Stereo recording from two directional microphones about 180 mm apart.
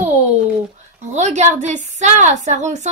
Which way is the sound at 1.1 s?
40° right (ahead or behind).